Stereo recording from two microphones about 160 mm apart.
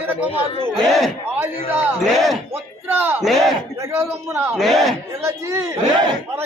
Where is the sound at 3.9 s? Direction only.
15° right (ahead or behind).